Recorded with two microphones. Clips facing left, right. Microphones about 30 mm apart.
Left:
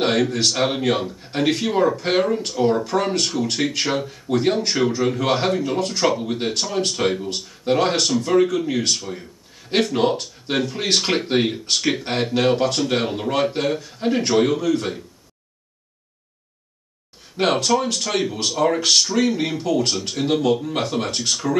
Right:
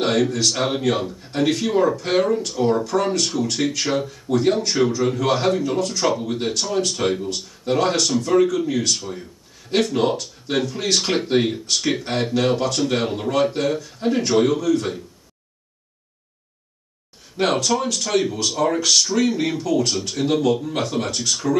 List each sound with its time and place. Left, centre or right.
0.0 s speech: left
17.4 s speech: left